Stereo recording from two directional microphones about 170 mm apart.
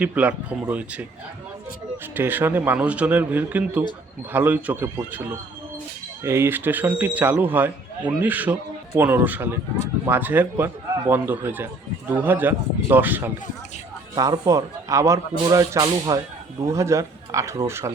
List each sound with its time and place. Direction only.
0.0 s a man's voice: 10° right (ahead or behind)
2.1 s a man's voice: 10° right (ahead or behind)